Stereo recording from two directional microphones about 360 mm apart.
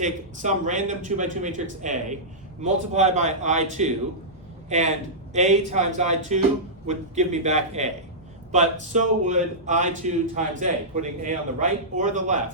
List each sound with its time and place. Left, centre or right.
0.0 s a man's voice: centre